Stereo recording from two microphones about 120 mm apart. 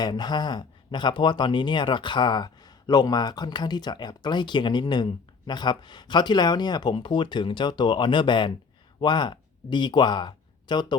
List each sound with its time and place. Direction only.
0.0 s speech: 35° left (ahead or behind)